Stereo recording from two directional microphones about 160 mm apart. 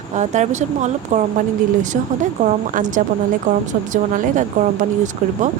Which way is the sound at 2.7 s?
55° right (ahead or behind).